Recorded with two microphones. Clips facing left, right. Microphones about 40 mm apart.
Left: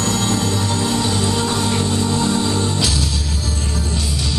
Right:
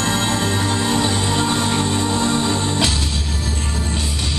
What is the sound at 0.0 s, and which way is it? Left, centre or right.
Music, right.